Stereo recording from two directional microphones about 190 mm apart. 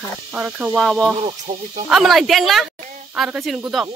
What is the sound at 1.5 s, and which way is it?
Speech, 45° right (ahead or behind).